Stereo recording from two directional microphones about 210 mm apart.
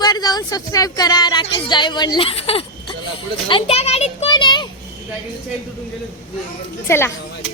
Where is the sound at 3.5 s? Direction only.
25° left (ahead or behind).